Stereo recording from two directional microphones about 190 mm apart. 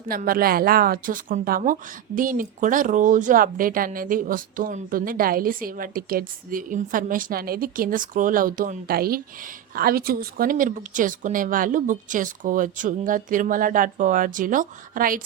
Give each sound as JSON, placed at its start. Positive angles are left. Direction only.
{"t": 0.1, "sound": "a woman's voice", "side_deg": -50}